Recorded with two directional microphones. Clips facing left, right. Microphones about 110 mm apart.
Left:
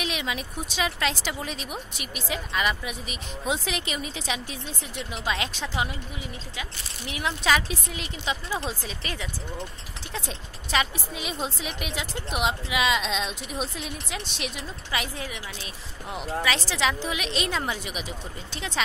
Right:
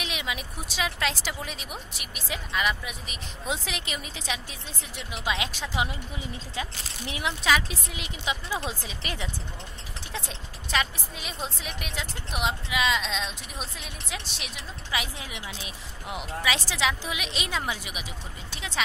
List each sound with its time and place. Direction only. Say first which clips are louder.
0.0 s speech: left 3 dB; 5° right (ahead or behind)
6.5 s speech: right 3 dB; 30° right (ahead or behind)
7.4 s speech: left 1 dB; 5° right (ahead or behind); by 9.3 s 20° right (ahead or behind)
10.7 s speech: left 2 dB; 5° left (ahead or behind)
15.1 s speech: left 3 dB; 15° right (ahead or behind)